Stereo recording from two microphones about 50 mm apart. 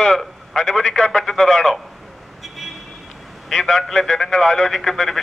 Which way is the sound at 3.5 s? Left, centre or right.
Centre.